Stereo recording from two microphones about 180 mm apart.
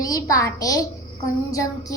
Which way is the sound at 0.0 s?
20° left (ahead or behind).